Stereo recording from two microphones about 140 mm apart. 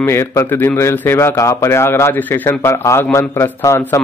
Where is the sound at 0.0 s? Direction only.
20° left (ahead or behind).